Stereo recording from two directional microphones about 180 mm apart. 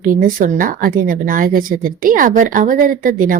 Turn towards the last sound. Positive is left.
turn(degrees=-50)  # may be behind; listen again after turning